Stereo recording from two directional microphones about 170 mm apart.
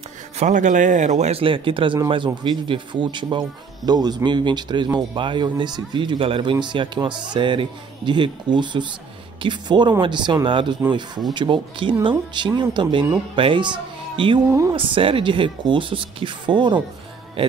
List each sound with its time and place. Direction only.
0.4 s speech: 45° right (ahead or behind); by 16.8 s 25° right (ahead or behind)